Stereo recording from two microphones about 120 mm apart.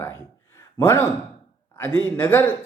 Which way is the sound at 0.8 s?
20° left (ahead or behind).